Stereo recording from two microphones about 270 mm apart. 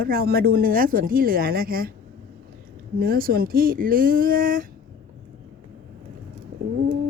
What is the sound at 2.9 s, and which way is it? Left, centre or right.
Speech, right.